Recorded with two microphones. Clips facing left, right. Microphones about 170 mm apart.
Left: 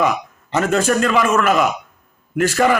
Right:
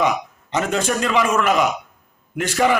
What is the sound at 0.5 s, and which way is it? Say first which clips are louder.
A man's voice: left 4 dB; 15° right (ahead or behind).